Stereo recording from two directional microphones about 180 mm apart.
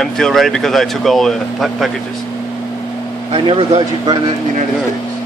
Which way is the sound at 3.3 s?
30° right (ahead or behind).